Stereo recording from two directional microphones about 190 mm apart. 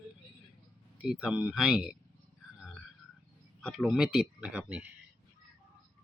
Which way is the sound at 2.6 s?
Centre (ahead or behind).